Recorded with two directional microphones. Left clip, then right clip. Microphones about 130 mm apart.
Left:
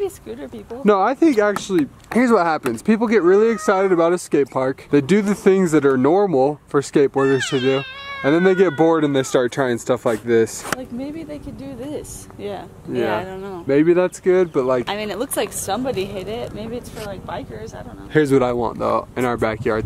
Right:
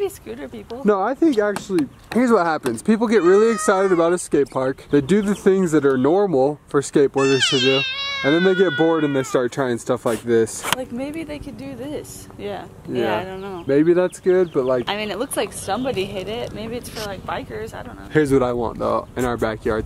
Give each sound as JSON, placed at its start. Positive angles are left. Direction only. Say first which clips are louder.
{"t": 0.8, "sound": "speech", "louder": "left 3 dB", "side_deg": 10}
{"t": 7.4, "sound": "speech", "louder": "right 3 dB", "side_deg": -30}
{"t": 8.2, "sound": "speech", "louder": "left 2 dB", "side_deg": 5}
{"t": 10.8, "sound": "speech", "louder": "right 2 dB", "side_deg": -20}
{"t": 12.4, "sound": "speech", "louder": "even", "side_deg": 0}
{"t": 18.1, "sound": "speech", "louder": "left 1 dB", "side_deg": 5}